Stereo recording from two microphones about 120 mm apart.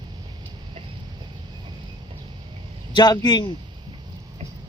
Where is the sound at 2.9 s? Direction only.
35° left (ahead or behind).